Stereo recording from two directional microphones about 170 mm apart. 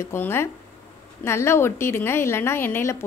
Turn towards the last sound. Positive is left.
turn(degrees=15)  # may be behind; listen again after turning